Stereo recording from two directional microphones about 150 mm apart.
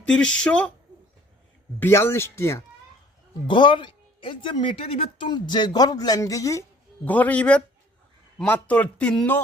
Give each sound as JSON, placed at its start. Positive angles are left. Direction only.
{"t": 0.1, "sound": "speech", "side_deg": 5}
{"t": 1.8, "sound": "speech", "side_deg": 15}
{"t": 3.4, "sound": "speech", "side_deg": 30}